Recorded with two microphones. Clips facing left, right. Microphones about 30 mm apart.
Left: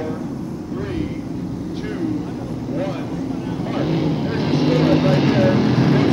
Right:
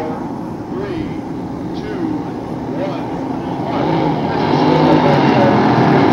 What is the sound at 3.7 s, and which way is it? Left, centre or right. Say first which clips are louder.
Vehicle: right 5 dB; centre.